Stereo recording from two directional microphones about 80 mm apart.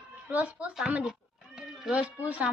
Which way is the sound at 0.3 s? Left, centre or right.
Centre.